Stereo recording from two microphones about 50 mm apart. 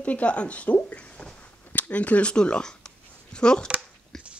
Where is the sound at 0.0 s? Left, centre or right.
Left.